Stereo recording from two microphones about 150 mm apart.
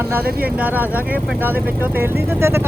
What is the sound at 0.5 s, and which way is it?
Speech, 10° right (ahead or behind).